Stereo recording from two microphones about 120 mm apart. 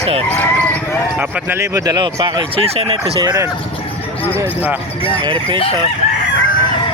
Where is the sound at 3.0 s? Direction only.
30° right (ahead or behind).